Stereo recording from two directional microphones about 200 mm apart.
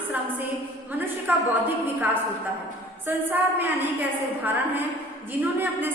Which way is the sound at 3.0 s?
10° right (ahead or behind).